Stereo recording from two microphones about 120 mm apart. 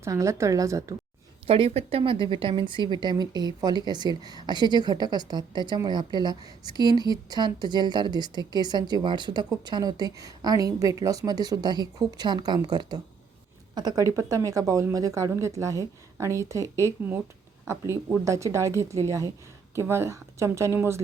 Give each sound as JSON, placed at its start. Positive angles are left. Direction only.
{"t": 0.0, "sound": "a woman's voice", "side_deg": -25}
{"t": 1.5, "sound": "speech", "side_deg": -50}
{"t": 14.0, "sound": "a woman's voice", "side_deg": -25}